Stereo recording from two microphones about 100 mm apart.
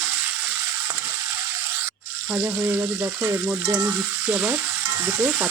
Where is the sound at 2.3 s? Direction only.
20° right (ahead or behind).